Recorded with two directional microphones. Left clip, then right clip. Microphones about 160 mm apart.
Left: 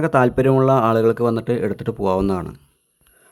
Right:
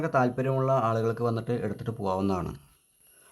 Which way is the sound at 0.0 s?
45° left (ahead or behind).